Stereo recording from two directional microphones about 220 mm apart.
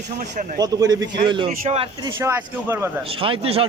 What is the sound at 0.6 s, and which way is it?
A man's voice, 15° right (ahead or behind).